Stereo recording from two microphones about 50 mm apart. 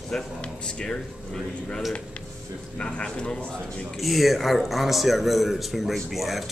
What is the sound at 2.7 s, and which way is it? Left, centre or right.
Speech, centre.